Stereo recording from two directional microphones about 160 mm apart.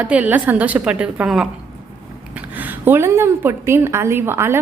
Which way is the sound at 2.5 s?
10° right (ahead or behind).